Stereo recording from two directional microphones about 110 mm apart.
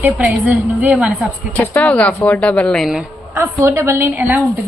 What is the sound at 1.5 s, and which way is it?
A woman's voice, 10° left (ahead or behind).